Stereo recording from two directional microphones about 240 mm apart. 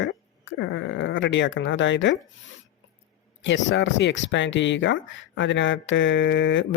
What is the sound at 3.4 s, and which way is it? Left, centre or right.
Speech, left.